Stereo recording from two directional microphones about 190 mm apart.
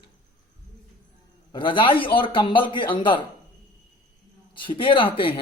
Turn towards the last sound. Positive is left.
turn(degrees=30)  # may be behind; listen again after turning